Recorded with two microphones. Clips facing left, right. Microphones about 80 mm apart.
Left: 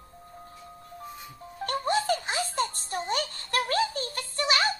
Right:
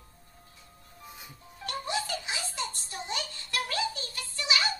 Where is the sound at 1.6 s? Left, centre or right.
Left.